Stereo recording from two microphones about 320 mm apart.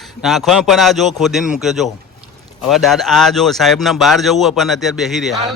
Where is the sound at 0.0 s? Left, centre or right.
Centre.